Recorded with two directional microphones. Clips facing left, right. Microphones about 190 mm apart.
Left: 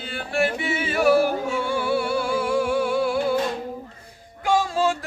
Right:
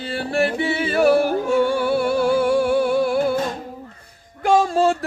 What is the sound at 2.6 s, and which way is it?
Music, 55° right (ahead or behind).